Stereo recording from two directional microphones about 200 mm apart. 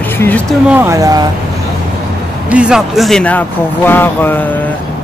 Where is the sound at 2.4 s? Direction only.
5° right (ahead or behind).